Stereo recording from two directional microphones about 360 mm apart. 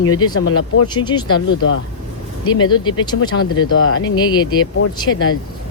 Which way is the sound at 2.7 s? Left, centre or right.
Centre.